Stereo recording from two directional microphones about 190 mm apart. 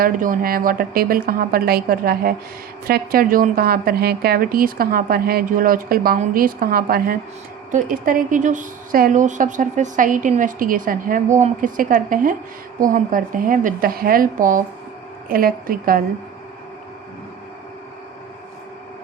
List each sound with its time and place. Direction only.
0.0 s a woman's voice: 50° right (ahead or behind)